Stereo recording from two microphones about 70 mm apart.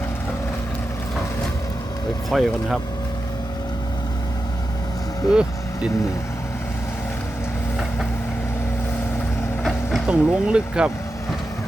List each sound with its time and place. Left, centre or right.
2.3 s speech: centre
5.3 s vehicle: centre
10.1 s speech: centre